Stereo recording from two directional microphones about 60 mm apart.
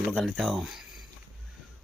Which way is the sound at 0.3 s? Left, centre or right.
Centre.